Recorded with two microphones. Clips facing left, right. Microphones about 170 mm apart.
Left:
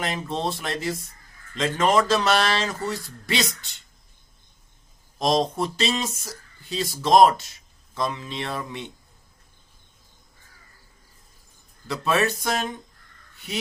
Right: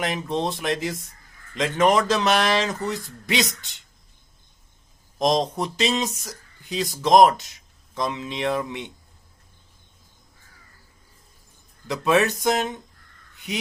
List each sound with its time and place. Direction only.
0.0 s speech: 15° right (ahead or behind)
5.2 s speech: 20° right (ahead or behind)
11.9 s speech: 15° right (ahead or behind)
13.3 s crow: 15° right (ahead or behind)